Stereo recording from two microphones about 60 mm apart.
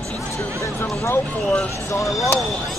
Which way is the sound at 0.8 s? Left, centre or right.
Left.